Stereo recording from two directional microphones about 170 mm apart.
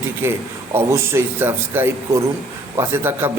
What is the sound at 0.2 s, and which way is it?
A man's voice, 15° right (ahead or behind).